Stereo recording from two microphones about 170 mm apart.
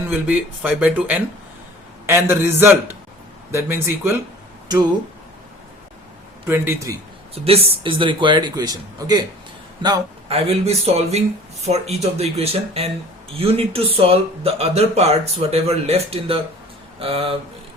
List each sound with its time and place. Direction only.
0.1 s a man's voice: 10° right (ahead or behind)
6.4 s speech: 15° right (ahead or behind)
7.3 s speech: 35° right (ahead or behind)